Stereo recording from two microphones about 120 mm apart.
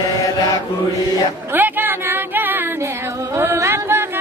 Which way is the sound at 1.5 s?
15° right (ahead or behind).